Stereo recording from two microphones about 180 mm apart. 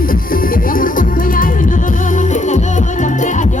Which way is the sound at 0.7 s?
50° left (ahead or behind).